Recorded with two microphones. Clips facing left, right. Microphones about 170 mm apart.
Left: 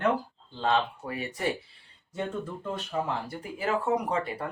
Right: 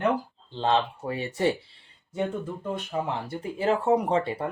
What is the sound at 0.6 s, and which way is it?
Speech, 25° right (ahead or behind).